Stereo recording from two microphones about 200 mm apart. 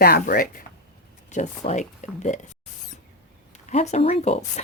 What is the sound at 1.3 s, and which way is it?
Speech, 35° left (ahead or behind).